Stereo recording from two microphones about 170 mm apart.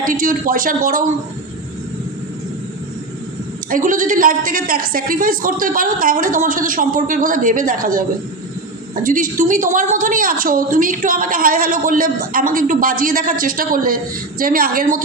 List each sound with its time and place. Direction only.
0.0 s a woman's voice: 55° right (ahead or behind)
3.7 s a woman's voice: 50° right (ahead or behind)
9.0 s a woman's voice: 55° right (ahead or behind)